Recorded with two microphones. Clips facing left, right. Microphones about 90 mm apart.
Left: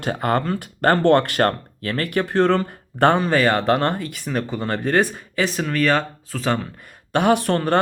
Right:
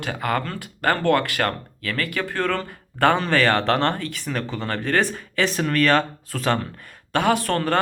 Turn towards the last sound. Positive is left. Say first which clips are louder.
# left 3 dB
turn(degrees=20)  # may be behind; listen again after turning